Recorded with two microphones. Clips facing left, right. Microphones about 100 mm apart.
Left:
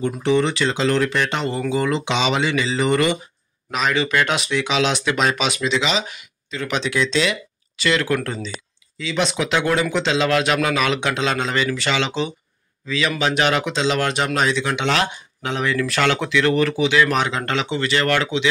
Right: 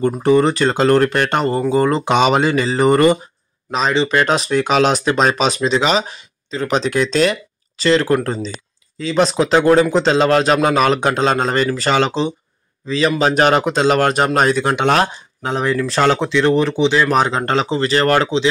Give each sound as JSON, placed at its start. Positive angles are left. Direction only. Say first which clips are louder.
{"t": 0.0, "sound": "speech", "louder": "right 5 dB", "side_deg": -45}
{"t": 3.7, "sound": "a man's voice", "louder": "right 4 dB", "side_deg": -30}